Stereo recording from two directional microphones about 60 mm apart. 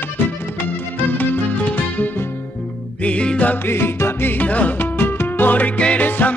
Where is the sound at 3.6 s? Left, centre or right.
Left.